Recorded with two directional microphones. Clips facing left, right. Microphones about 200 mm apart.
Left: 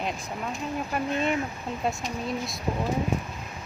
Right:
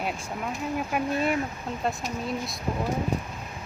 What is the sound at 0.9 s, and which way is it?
Speech, 5° right (ahead or behind).